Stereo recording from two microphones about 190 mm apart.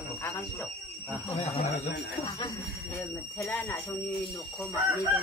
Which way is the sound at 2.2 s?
25° left (ahead or behind).